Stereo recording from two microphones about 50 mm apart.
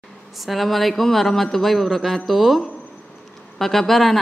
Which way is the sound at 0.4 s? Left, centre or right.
Centre.